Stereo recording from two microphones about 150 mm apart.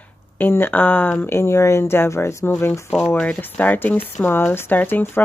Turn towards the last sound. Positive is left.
turn(degrees=15)  # may be behind; listen again after turning